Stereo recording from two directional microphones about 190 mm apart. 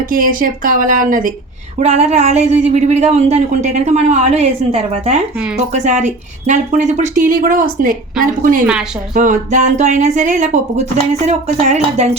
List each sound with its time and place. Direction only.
0.1 s speech: 45° right (ahead or behind)